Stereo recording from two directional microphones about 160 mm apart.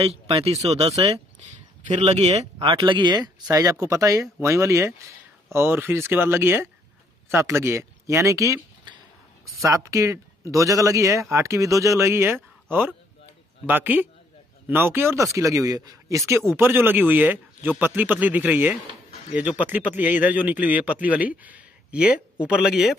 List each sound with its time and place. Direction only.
0.0 s a man's voice: 40° right (ahead or behind); by 22.9 s 5° right (ahead or behind)